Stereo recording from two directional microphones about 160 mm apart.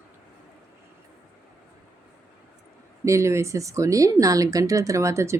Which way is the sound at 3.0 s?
20° right (ahead or behind).